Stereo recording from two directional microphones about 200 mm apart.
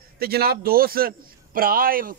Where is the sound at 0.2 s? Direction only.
50° right (ahead or behind).